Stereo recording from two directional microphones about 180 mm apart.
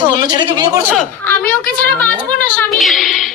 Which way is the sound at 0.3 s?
20° right (ahead or behind).